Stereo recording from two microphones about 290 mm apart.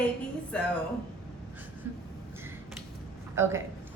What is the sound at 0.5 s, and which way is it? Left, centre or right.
Speech, centre.